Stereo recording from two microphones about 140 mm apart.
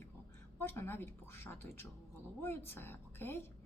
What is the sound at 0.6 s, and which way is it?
Speech, 15° left (ahead or behind).